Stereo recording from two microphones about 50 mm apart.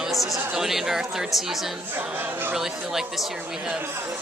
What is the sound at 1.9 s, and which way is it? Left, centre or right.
Speech, right.